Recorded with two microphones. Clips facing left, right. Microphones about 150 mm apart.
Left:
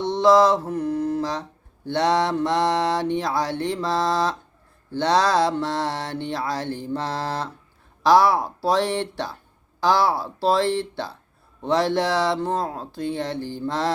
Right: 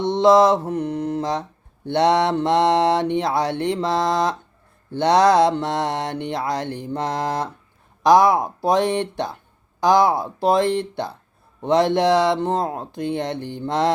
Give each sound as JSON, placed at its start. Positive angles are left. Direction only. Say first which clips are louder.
{"t": 0.0, "sound": "mantra", "louder": "right 2 dB", "side_deg": -20}